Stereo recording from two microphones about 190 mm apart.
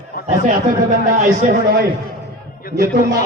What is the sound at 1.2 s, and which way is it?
Speech, 40° right (ahead or behind).